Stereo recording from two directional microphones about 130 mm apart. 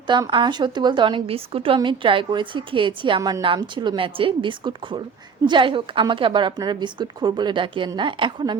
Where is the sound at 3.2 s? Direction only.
25° right (ahead or behind).